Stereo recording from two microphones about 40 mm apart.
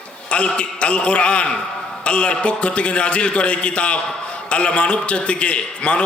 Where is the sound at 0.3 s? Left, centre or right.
Left.